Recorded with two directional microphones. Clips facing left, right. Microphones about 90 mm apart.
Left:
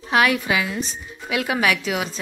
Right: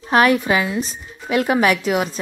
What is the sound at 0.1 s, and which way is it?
A woman's voice, 40° right (ahead or behind).